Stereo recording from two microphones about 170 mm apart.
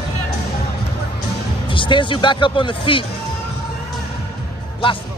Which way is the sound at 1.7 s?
30° left (ahead or behind).